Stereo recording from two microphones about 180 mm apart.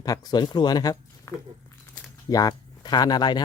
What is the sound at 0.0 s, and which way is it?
Speech, 20° left (ahead or behind).